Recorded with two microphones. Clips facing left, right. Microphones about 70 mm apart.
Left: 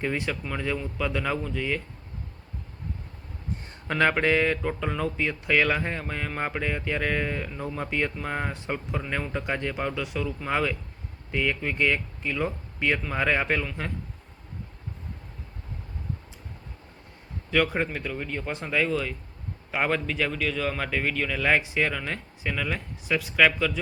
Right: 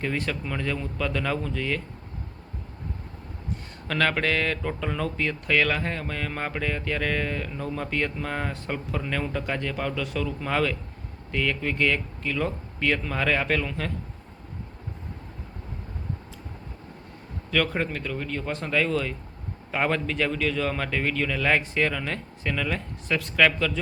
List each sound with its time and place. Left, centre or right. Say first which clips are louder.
0.0 s speech: even; centre
3.8 s speech: left 2 dB; centre
17.5 s a man's voice: left 1 dB; centre